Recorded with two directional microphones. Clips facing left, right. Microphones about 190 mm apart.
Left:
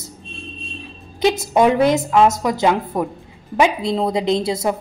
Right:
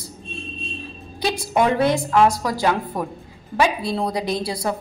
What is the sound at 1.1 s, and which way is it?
A woman's voice, 20° left (ahead or behind).